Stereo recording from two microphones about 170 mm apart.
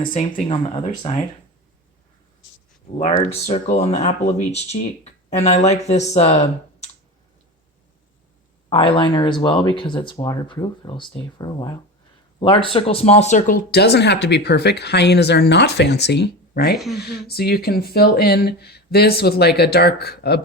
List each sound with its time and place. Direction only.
0.1 s speech: 50° left (ahead or behind)
0.4 s speech: 35° left (ahead or behind)
3.0 s speech: 40° left (ahead or behind)
5.4 s speech: 40° left (ahead or behind)
8.7 s speech: 30° left (ahead or behind)
13.7 s speech: 70° left (ahead or behind)
16.7 s speech: centre (ahead or behind)
17.0 s speech: 70° left (ahead or behind)